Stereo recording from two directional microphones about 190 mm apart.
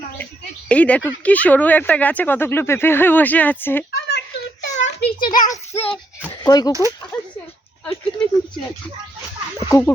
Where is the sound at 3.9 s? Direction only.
60° left (ahead or behind).